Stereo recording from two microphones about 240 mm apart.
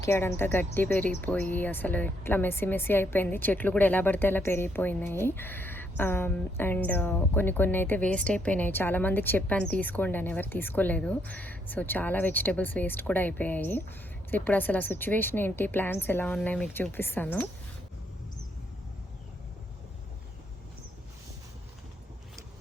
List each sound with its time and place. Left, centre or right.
0.0 s a woman's voice: centre